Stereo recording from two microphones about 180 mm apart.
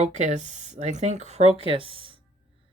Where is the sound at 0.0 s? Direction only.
40° right (ahead or behind).